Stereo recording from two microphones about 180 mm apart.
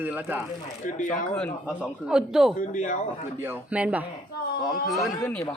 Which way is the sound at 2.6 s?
45° left (ahead or behind).